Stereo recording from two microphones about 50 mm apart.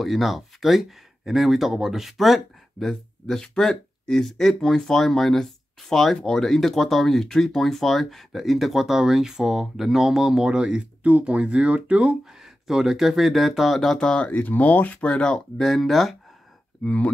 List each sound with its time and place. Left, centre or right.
0.0 s speech: centre
2.9 s speech: centre; by 12.2 s right
12.6 s speech: centre
13.9 s speech: left
14.3 s speech: left
15.5 s speech: centre
16.8 s speech: left